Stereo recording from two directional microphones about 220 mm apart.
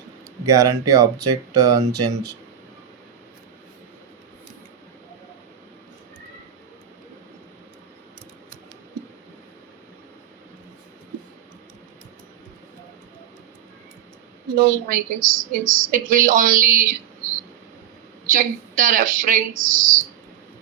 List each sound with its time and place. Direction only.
0.4 s speech: 15° right (ahead or behind)
14.5 s a woman's voice: 40° right (ahead or behind)